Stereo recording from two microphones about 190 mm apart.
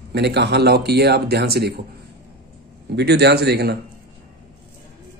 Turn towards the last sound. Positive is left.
turn(degrees=-60)  # may be behind; listen again after turning